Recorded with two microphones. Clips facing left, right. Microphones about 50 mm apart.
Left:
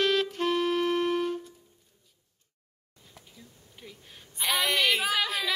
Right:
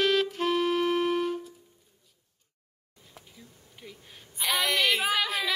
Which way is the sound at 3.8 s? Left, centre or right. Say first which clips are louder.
Right 1 dB; centre.